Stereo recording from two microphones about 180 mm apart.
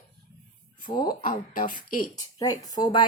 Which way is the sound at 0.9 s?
25° left (ahead or behind).